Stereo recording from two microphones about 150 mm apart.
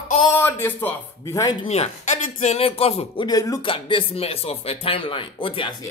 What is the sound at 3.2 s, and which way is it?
Speech, 25° left (ahead or behind).